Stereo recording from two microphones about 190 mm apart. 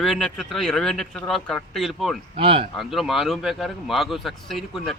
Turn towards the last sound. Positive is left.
turn(degrees=0)  # may be behind; listen again after turning